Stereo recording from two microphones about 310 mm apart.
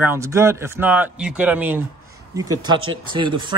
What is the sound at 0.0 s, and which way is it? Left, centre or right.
A man's voice, centre.